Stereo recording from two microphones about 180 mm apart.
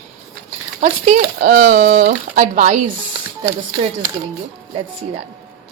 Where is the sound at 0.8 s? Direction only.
40° right (ahead or behind).